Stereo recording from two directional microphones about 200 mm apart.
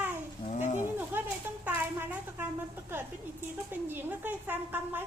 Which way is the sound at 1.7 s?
10° right (ahead or behind).